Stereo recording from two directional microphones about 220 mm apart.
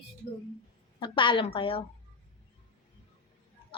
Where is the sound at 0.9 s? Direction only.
20° left (ahead or behind).